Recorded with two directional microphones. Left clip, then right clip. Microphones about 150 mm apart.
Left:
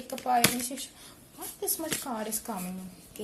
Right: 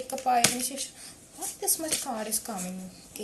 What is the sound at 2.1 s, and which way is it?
Speech, 25° left (ahead or behind).